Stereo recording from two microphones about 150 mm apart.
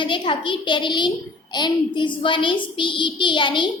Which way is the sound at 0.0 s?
35° left (ahead or behind).